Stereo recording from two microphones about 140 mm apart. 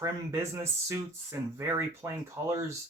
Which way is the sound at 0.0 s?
20° right (ahead or behind).